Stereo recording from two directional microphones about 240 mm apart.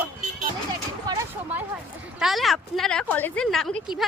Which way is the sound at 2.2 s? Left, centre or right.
Centre.